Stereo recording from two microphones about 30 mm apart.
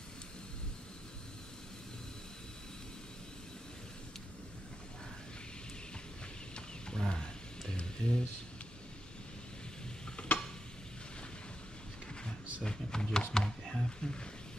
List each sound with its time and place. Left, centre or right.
6.5 s roaring cats: left
10.2 s a sound: left
12.6 s speech: left